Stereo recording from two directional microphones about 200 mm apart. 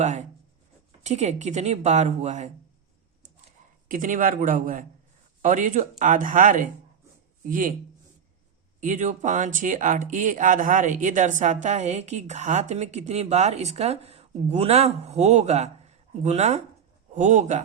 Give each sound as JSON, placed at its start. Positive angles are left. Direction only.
{"t": 0.0, "sound": "speech", "side_deg": -35}
{"t": 3.8, "sound": "a man's voice", "side_deg": -45}
{"t": 8.8, "sound": "speech", "side_deg": -40}